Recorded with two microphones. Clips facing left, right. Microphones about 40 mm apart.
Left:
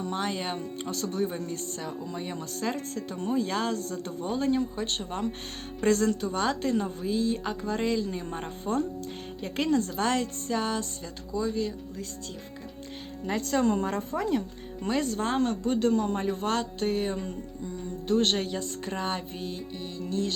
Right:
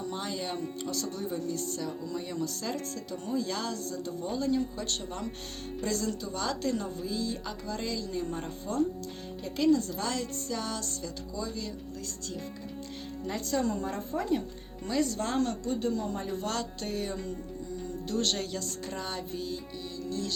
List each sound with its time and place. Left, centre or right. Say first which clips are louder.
0.0 s speech: left 4 dB; left
5.8 s speech: left 8 dB; left
13.2 s speech: left 5 dB; left
14.8 s speech: left 2 dB; left
15.7 s speech: left 6 dB; left
16.2 s speech: left 5 dB; left